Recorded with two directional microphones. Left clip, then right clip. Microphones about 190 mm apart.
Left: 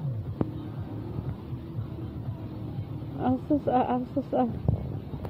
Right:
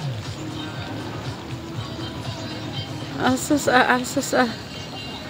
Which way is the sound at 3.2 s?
30° right (ahead or behind).